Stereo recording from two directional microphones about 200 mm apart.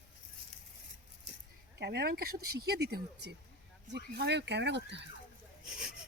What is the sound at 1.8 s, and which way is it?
Speech, 55° right (ahead or behind).